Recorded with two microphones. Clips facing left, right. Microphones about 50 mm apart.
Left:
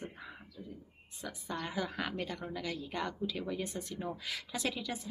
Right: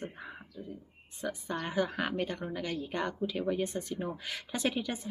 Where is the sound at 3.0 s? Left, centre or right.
Right.